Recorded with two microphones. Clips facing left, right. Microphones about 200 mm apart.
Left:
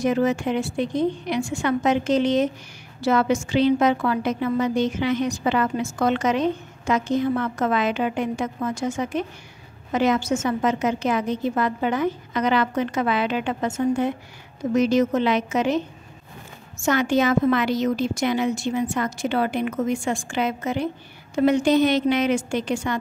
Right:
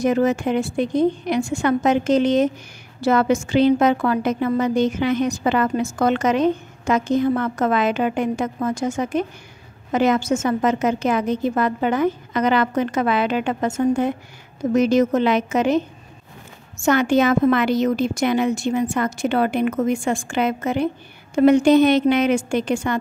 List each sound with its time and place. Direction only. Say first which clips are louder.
0.0 s a woman's voice: right 3 dB; 45° right (ahead or behind)
16.8 s a woman's voice: right 3 dB; 55° right (ahead or behind)